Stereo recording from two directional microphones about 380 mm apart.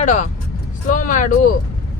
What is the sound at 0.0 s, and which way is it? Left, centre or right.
Speech, centre.